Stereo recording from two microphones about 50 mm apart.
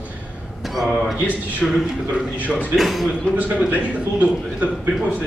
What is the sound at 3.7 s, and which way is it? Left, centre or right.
Speech, right.